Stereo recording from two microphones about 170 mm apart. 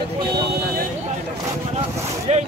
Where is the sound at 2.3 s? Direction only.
40° right (ahead or behind).